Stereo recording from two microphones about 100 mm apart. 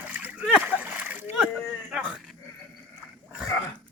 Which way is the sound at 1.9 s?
10° right (ahead or behind).